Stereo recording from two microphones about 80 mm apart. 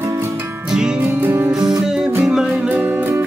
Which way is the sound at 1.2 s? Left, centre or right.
Right.